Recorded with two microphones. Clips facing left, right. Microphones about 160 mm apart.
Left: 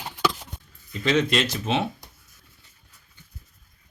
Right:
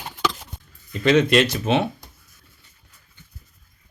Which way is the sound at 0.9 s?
60° right (ahead or behind).